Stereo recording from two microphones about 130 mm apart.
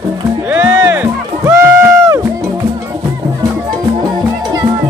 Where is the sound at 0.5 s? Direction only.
15° right (ahead or behind).